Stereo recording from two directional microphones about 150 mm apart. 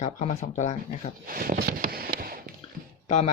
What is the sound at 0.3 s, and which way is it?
Speech, 50° left (ahead or behind).